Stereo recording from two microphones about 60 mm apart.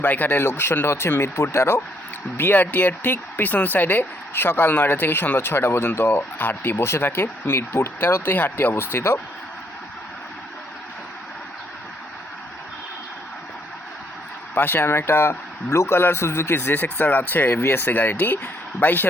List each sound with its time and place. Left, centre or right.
0.0 s speech: left
2.4 s speech: left
14.5 s a man's voice: left
16.8 s speech: left